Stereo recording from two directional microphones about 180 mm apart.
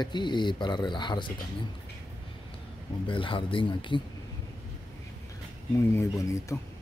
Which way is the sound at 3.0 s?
30° left (ahead or behind).